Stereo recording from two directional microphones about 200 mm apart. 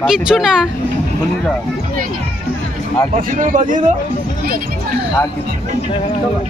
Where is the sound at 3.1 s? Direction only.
40° right (ahead or behind).